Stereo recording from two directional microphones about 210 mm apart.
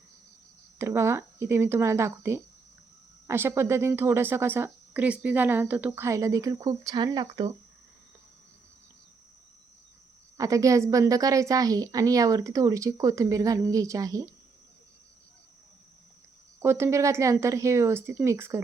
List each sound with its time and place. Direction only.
0.8 s speech: 10° right (ahead or behind)
10.3 s speech: 15° right (ahead or behind)
16.6 s speech: 10° right (ahead or behind)